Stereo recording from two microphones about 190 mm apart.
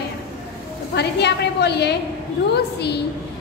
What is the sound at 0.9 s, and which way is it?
A woman's voice, 60° left (ahead or behind).